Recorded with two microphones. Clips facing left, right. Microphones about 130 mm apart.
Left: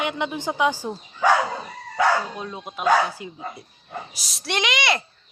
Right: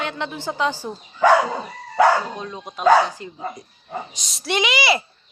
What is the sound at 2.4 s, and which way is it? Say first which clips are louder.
A woman's voice: right 4 dB; 5° left (ahead or behind).